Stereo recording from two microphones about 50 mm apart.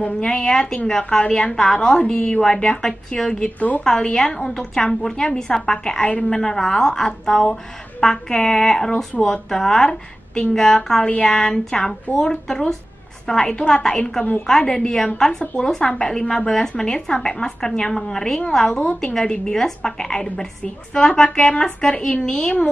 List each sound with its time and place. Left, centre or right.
0.0 s a woman's voice: centre
2.1 s a woman's voice: left
3.4 s a woman's voice: left
3.8 s a woman's voice: centre
6.0 s a woman's voice: left
6.3 s a woman's voice: centre
11.1 s a woman's voice: left
11.3 s a woman's voice: centre